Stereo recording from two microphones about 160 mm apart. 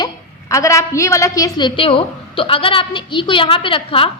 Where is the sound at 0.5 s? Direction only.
20° left (ahead or behind).